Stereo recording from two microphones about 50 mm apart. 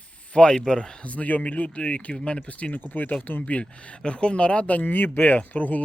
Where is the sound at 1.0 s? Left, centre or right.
Left.